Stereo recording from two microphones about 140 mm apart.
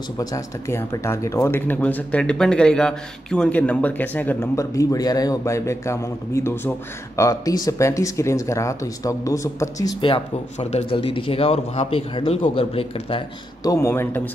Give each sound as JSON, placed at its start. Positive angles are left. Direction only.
{"t": 0.2, "sound": "speech", "side_deg": 20}
{"t": 9.9, "sound": "speech", "side_deg": 40}
{"t": 13.6, "sound": "speech", "side_deg": 25}